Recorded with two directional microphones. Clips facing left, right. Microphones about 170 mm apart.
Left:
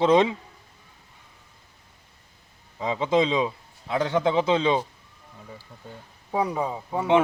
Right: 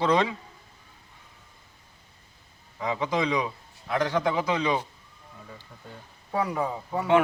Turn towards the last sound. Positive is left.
turn(degrees=20)  # may be behind; listen again after turning